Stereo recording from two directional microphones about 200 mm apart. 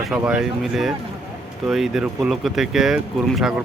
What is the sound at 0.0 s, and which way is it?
Speech, 5° right (ahead or behind).